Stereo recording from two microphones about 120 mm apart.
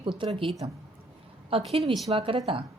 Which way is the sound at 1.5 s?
50° right (ahead or behind).